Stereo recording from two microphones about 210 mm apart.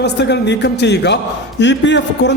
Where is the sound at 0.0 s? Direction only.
55° left (ahead or behind).